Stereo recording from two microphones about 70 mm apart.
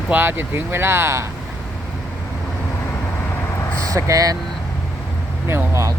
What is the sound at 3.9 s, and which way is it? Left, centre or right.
Speech, right.